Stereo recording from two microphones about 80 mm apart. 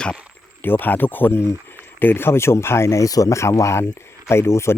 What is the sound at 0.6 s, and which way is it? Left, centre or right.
Speech, left.